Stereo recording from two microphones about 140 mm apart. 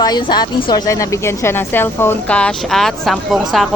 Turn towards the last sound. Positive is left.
turn(degrees=0)  # may be behind; listen again after turning